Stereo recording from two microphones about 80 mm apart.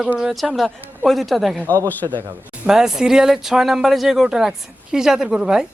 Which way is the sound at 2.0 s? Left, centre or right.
Right.